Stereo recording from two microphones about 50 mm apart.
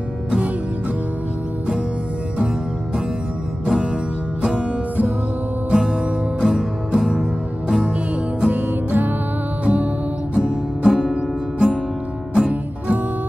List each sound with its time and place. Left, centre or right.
3.6 s music: centre
5.7 s music: centre
8.5 s music: right
10.3 s music: centre